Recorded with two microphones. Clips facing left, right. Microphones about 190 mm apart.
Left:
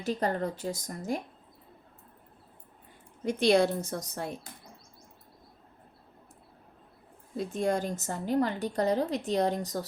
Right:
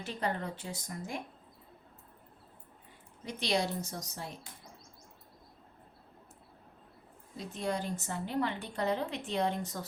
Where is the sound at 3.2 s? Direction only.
50° left (ahead or behind).